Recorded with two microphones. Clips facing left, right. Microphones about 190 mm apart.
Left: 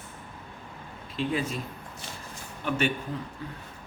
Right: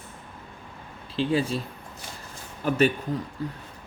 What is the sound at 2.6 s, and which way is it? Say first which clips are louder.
Speech: right 6 dB; 40° right (ahead or behind).